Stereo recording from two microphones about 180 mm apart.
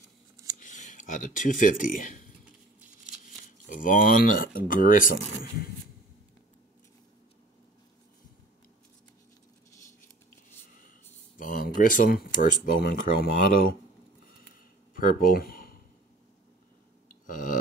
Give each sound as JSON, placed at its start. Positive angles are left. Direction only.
{"t": 0.6, "sound": "speech", "side_deg": 45}
{"t": 3.6, "sound": "speech", "side_deg": 50}
{"t": 11.3, "sound": "speech", "side_deg": 50}
{"t": 15.0, "sound": "speech", "side_deg": 50}
{"t": 17.3, "sound": "a sound", "side_deg": 45}